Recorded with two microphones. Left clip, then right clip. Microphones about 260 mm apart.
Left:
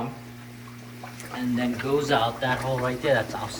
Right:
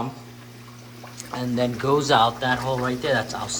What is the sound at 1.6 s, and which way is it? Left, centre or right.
Speech, centre.